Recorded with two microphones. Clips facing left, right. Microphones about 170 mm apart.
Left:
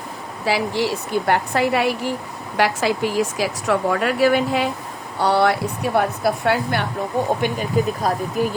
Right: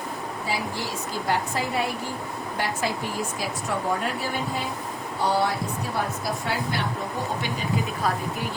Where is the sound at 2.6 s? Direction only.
90° left; by 6.8 s 65° left (ahead or behind).